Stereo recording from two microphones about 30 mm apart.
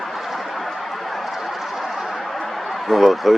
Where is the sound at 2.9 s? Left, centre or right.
Centre.